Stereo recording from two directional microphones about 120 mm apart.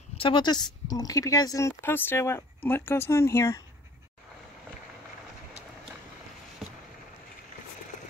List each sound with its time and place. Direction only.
0.2 s a woman's voice: 40° left (ahead or behind); by 3.6 s 25° left (ahead or behind)